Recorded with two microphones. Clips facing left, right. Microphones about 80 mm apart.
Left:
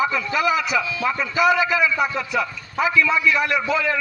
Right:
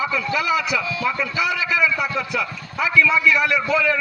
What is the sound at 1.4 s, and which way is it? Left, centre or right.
Speech, left.